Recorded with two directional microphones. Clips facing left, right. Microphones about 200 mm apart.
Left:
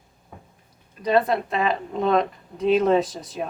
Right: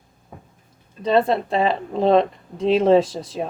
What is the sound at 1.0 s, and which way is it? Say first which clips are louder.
A woman's voice: right 2 dB; 25° right (ahead or behind).